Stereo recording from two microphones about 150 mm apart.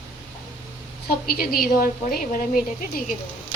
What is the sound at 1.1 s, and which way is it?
A woman's voice, 85° left.